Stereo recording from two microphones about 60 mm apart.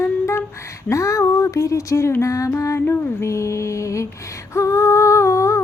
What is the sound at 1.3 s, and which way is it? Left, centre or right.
Speech, left.